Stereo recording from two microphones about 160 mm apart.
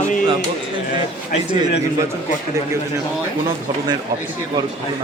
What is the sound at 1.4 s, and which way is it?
Speech, 25° right (ahead or behind).